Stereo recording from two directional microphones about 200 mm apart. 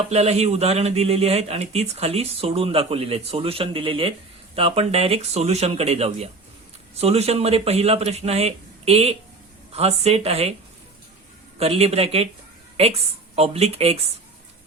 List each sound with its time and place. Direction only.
0.1 s speech: 30° right (ahead or behind)
11.6 s a woman's voice: 30° right (ahead or behind)